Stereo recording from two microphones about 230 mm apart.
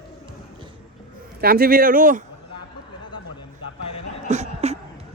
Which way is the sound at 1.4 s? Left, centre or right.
Right.